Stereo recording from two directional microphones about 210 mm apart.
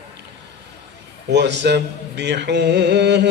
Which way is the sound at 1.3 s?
55° right (ahead or behind).